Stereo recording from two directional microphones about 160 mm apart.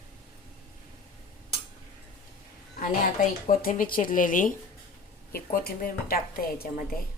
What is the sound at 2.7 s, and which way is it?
Speech, 55° left (ahead or behind).